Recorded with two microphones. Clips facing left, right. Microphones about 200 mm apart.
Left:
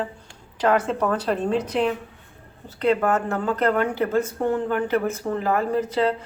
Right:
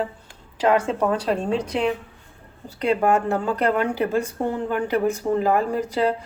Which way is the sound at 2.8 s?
15° right (ahead or behind).